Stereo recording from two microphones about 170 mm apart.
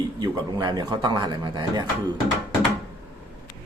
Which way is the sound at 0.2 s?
25° right (ahead or behind).